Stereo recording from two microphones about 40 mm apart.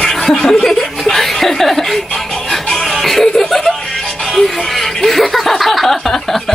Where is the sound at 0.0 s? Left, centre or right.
Centre.